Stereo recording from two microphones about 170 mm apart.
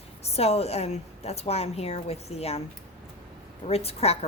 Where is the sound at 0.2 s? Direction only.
35° left (ahead or behind).